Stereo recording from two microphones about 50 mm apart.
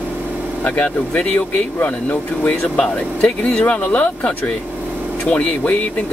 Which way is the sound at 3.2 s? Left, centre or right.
Left.